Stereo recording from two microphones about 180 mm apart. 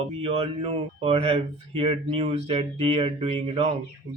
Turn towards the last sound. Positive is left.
turn(degrees=-30)  # may be behind; listen again after turning